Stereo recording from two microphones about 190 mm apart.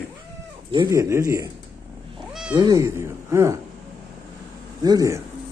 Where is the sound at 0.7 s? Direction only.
20° right (ahead or behind).